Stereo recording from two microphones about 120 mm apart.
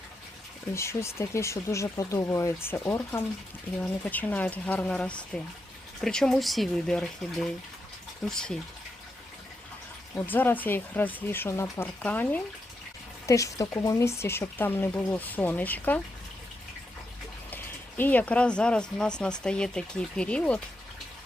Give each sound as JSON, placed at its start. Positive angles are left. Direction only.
{"t": 0.7, "sound": "speech", "side_deg": 25}
{"t": 10.2, "sound": "speech", "side_deg": 15}
{"t": 13.2, "sound": "speech", "side_deg": 25}
{"t": 17.5, "sound": "speech", "side_deg": 15}